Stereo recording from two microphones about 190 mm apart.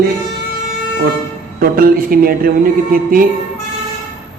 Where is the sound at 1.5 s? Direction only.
50° right (ahead or behind).